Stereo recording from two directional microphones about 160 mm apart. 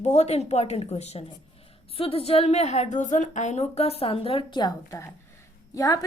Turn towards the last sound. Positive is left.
turn(degrees=20)  # may be behind; listen again after turning